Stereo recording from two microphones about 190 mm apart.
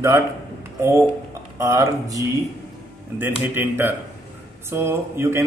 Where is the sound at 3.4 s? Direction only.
10° right (ahead or behind).